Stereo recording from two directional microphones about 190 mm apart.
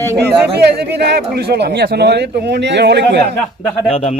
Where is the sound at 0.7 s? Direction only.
60° right (ahead or behind).